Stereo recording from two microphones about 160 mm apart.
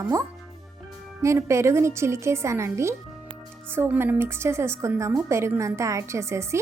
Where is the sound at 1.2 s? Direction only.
20° right (ahead or behind).